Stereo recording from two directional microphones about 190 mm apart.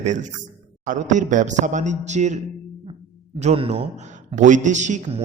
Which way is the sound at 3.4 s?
35° right (ahead or behind).